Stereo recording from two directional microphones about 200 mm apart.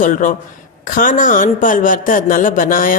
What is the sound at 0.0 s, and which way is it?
Speech, 40° left (ahead or behind).